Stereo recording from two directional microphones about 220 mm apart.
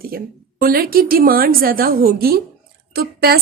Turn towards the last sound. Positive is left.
turn(degrees=-45)  # may be behind; listen again after turning